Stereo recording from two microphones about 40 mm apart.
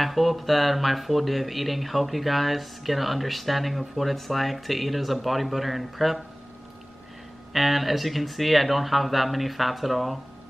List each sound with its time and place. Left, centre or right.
0.0 s speech: centre
7.5 s speech: centre